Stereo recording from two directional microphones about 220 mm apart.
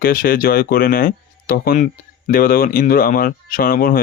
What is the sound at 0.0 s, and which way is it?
Speech, 40° left (ahead or behind).